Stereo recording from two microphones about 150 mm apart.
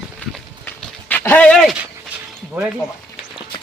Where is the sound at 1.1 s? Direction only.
10° left (ahead or behind).